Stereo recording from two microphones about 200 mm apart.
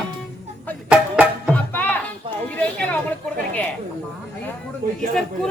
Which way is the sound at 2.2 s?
25° right (ahead or behind).